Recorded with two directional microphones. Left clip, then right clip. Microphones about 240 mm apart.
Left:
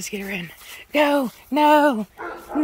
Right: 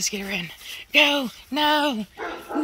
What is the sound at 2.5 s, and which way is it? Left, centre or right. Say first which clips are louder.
Music: left 4 dB; right.